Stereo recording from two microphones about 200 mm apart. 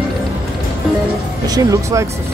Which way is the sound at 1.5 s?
15° right (ahead or behind).